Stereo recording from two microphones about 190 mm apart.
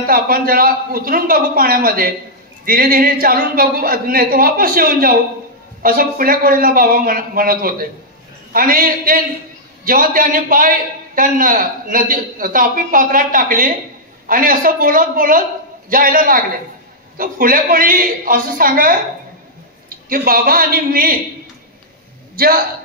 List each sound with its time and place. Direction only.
0.0 s a man's voice: 50° right (ahead or behind)
20.1 s a man's voice: 50° right (ahead or behind)
22.3 s a man's voice: 50° right (ahead or behind)